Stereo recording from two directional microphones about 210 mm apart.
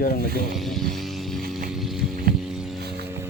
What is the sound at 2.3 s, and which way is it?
Vehicle, centre (ahead or behind).